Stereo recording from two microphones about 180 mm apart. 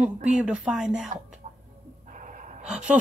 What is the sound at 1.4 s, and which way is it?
Chicken, 45° right (ahead or behind).